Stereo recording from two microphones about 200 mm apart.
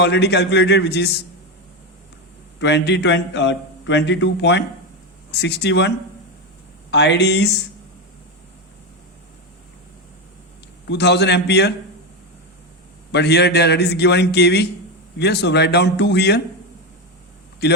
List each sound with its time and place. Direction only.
0.0 s a man's voice: 60° left (ahead or behind)
2.6 s a man's voice: 60° left (ahead or behind)
6.9 s a man's voice: 60° left (ahead or behind)
10.8 s a man's voice: 60° left (ahead or behind)
13.1 s a man's voice: 55° left (ahead or behind)